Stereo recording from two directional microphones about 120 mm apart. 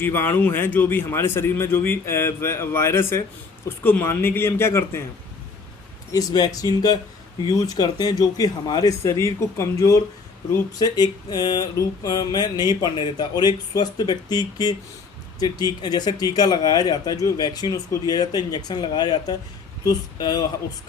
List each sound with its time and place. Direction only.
0.0 s a man's voice: 15° left (ahead or behind)
6.1 s a man's voice: 35° left (ahead or behind)